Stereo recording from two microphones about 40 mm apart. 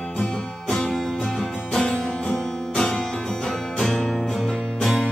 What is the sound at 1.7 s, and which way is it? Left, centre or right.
Music, centre.